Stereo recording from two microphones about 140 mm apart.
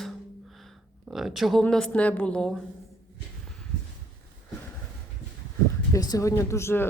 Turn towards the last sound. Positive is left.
turn(degrees=20)  # may be behind; listen again after turning